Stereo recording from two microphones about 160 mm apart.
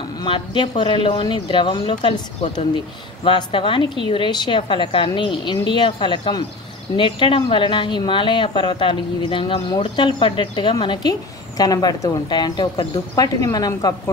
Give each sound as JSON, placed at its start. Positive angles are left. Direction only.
{"t": 0.2, "sound": "a woman's voice", "side_deg": 30}